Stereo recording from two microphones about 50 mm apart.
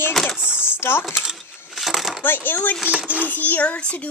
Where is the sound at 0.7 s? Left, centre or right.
Left.